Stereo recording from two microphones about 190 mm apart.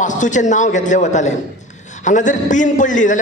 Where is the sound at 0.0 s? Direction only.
40° left (ahead or behind).